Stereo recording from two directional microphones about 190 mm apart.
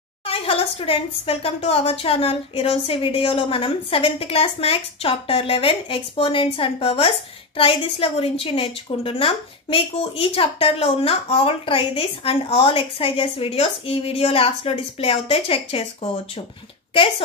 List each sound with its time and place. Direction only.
0.3 s a woman's voice: 30° left (ahead or behind)